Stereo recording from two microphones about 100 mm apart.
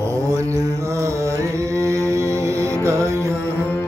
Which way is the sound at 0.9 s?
30° right (ahead or behind).